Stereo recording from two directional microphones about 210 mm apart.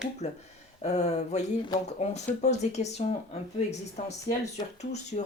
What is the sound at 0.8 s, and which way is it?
Speech, 30° left (ahead or behind).